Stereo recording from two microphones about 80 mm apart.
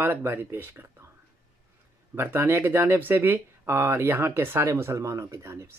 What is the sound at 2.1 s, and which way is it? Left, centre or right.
Speech, right.